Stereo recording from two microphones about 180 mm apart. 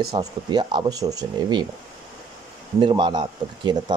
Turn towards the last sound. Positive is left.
turn(degrees=-25)  # may be behind; listen again after turning